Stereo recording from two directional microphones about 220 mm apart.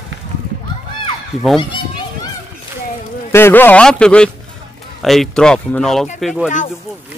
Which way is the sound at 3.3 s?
10° left (ahead or behind).